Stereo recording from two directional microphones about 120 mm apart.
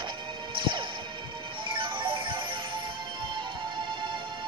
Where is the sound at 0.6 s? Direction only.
45° right (ahead or behind).